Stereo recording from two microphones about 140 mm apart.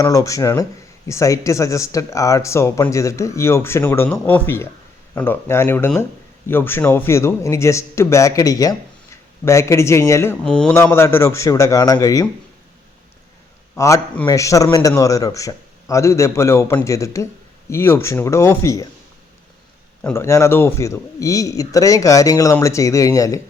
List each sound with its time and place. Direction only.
0.0 s speech: 25° left (ahead or behind)
10.4 s a man's voice: 5° left (ahead or behind)
10.9 s speech: 20° left (ahead or behind)
13.7 s speech: 20° left (ahead or behind)
20.1 s speech: 20° left (ahead or behind)